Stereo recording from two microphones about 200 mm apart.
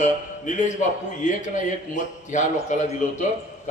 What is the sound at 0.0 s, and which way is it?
A man's voice, 40° left (ahead or behind).